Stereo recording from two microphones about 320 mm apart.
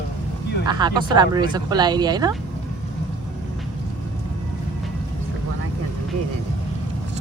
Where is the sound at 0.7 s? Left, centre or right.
Centre.